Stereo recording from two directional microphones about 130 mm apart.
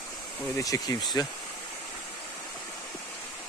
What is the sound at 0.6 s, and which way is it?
Speech, 25° left (ahead or behind).